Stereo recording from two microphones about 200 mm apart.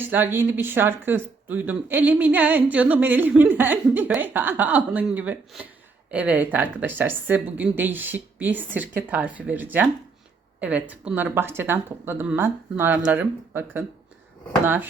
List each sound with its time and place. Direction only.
0.0 s speech: 10° right (ahead or behind)